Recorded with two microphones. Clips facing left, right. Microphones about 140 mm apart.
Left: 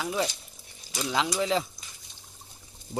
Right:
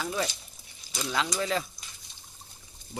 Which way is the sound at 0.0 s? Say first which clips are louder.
Left 2 dB; 15° left (ahead or behind).